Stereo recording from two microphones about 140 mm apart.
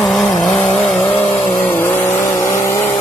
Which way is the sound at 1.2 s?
35° left (ahead or behind).